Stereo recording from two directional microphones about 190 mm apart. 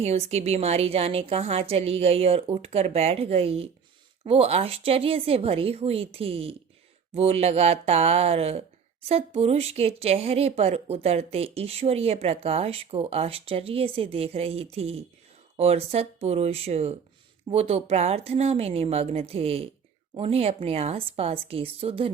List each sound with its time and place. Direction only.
0.0 s speech: 35° right (ahead or behind)